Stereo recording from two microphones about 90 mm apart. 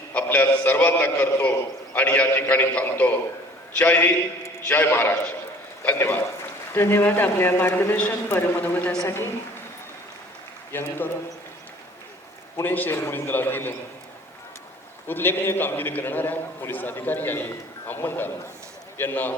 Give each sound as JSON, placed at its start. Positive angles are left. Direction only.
{"t": 0.1, "sound": "a man's voice", "side_deg": 15}
{"t": 10.7, "sound": "a man's voice", "side_deg": 25}
{"t": 12.5, "sound": "a man's voice", "side_deg": 20}
{"t": 15.0, "sound": "a man's voice", "side_deg": 25}